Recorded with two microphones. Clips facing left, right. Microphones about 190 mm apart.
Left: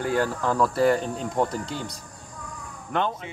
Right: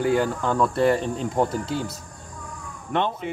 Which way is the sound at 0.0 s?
Centre (ahead or behind).